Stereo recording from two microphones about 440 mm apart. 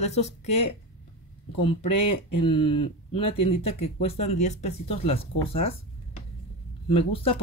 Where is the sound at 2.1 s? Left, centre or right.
Left.